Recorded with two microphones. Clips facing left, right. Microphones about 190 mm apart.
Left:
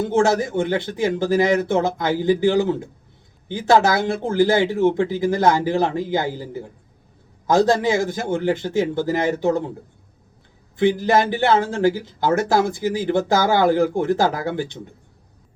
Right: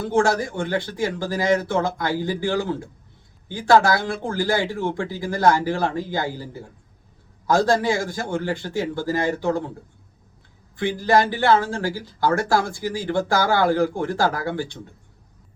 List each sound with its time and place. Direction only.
0.0 s speech: 20° left (ahead or behind)
10.8 s speech: 20° left (ahead or behind)